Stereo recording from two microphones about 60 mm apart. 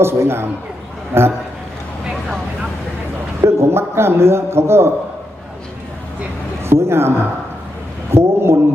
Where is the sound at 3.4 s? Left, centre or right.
Right.